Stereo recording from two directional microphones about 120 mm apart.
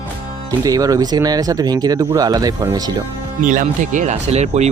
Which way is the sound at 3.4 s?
90° right.